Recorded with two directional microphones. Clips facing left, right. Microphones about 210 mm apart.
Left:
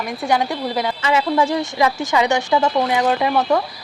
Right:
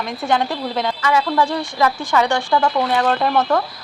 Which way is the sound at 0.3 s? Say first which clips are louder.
Even; 10° left (ahead or behind).